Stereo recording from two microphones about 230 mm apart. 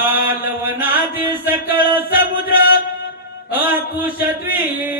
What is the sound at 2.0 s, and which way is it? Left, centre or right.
Chant, left.